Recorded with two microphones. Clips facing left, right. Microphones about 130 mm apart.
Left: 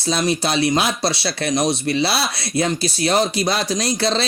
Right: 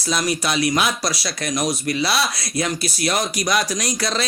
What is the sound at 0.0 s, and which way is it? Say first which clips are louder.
Speech: left 3 dB; 30° left (ahead or behind).